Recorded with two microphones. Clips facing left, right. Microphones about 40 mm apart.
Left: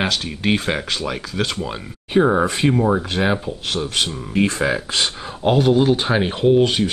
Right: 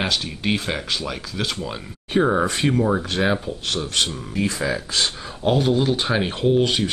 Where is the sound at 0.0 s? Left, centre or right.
Centre.